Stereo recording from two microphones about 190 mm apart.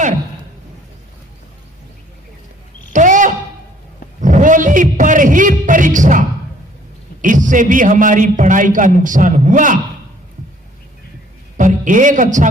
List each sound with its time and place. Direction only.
2.9 s a sound: 40° right (ahead or behind)
7.2 s a man's voice: 40° right (ahead or behind)
11.5 s a man's voice: 45° right (ahead or behind)